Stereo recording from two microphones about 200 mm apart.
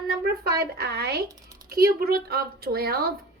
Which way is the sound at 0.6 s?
55° right (ahead or behind).